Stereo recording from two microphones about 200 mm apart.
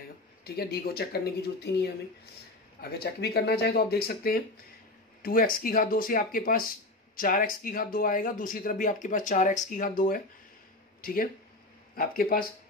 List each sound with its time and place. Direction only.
0.4 s speech: 50° left (ahead or behind)